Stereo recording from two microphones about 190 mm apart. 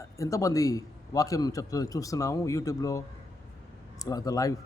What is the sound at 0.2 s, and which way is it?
Speech, 15° left (ahead or behind).